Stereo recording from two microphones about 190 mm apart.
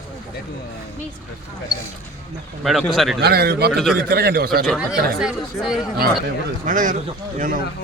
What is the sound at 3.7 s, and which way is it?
Speech, centre (ahead or behind).